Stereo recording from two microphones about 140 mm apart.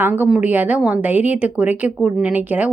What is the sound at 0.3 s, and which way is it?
A woman's voice, 10° right (ahead or behind).